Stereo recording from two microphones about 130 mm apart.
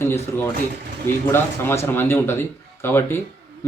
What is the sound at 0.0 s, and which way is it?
A man's voice, 20° left (ahead or behind).